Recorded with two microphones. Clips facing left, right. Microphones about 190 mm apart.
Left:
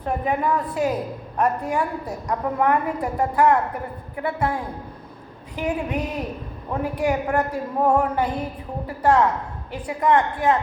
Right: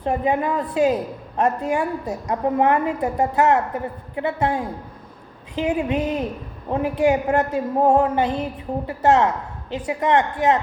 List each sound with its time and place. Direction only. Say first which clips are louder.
0.0 s a woman's voice: right 2 dB; 25° right (ahead or behind)
7.0 s a woman's voice: right 4 dB; 25° right (ahead or behind)